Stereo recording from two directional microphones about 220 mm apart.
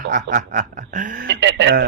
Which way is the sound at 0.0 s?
35° right (ahead or behind).